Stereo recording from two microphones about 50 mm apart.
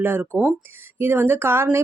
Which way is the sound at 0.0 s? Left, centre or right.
Right.